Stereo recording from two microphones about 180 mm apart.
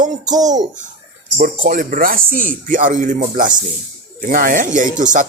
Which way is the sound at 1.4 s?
45° right (ahead or behind).